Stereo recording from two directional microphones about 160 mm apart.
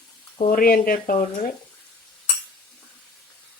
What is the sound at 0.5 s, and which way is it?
Speech, 65° left (ahead or behind).